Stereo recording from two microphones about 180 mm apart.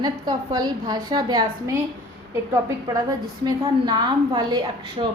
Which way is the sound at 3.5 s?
20° right (ahead or behind).